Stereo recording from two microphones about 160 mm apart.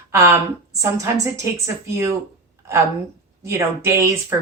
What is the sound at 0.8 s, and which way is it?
Speech, 20° right (ahead or behind).